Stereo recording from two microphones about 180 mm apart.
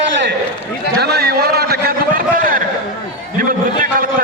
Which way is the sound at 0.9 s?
65° right (ahead or behind).